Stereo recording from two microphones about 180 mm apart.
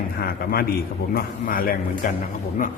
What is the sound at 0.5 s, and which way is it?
A man's voice, 55° left (ahead or behind).